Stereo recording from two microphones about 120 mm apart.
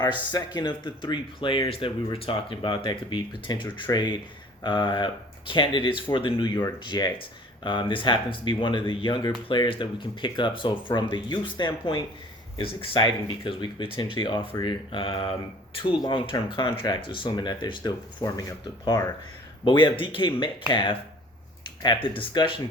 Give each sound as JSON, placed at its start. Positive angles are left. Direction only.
{"t": 0.0, "sound": "speech", "side_deg": 40}
{"t": 19.6, "sound": "speech", "side_deg": 45}